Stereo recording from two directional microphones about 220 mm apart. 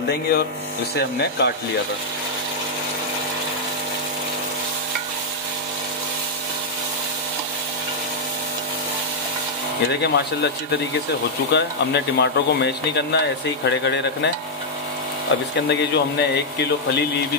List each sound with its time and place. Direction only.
1.4 s speech: 50° left (ahead or behind)
9.8 s speech: 50° left (ahead or behind)
11.5 s speech: 50° left (ahead or behind)
15.7 s speech: 50° left (ahead or behind)